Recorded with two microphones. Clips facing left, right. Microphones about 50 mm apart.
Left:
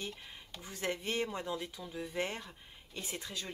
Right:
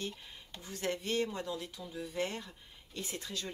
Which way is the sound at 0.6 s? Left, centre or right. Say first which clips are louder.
Right 1 dB; left.